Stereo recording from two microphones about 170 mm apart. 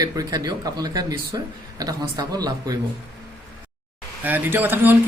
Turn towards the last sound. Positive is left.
turn(degrees=-10)  # may be behind; listen again after turning